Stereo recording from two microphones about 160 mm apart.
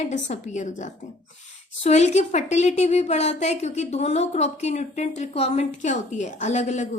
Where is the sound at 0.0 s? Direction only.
50° left (ahead or behind).